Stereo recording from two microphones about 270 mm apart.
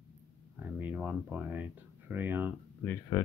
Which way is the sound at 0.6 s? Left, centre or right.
Centre.